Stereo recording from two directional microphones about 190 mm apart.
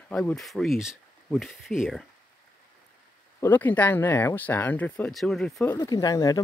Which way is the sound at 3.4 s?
10° left (ahead or behind).